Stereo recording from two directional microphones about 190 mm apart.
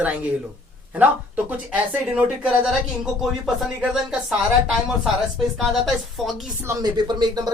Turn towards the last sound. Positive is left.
turn(degrees=-20)  # may be behind; listen again after turning